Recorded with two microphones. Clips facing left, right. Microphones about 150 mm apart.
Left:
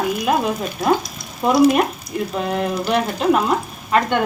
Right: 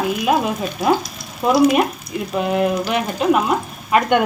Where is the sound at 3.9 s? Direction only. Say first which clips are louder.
Right 2 dB; 15° right (ahead or behind).